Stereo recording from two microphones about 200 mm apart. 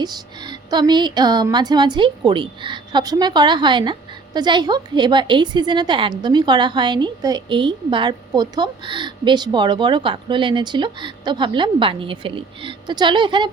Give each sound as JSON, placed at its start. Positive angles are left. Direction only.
{"t": 0.0, "sound": "a woman's voice", "side_deg": -20}